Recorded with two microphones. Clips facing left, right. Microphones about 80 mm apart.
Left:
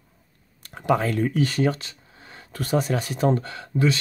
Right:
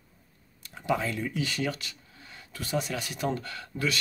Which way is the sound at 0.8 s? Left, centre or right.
Left.